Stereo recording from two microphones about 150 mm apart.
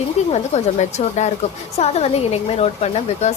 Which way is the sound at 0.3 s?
50° left (ahead or behind).